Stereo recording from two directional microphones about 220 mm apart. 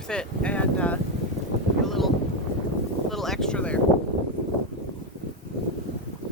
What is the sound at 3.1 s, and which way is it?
Speech, centre (ahead or behind).